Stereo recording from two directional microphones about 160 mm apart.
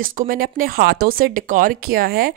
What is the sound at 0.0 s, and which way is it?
Speech, 60° right (ahead or behind).